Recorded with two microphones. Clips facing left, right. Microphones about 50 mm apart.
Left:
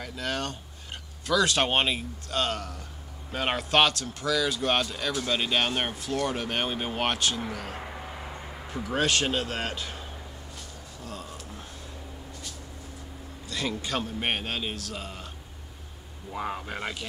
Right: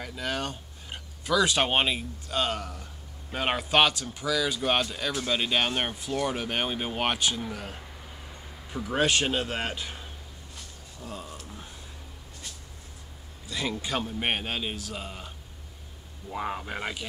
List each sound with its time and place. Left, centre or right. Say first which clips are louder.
0.0 s a man's voice: even; centre
7.7 s a sound: left 7 dB; left
9.0 s a man's voice: right 1 dB; centre
11.0 s a sound: right 1 dB; centre
13.5 s a man's voice: even; centre
16.3 s speech: right 1 dB; centre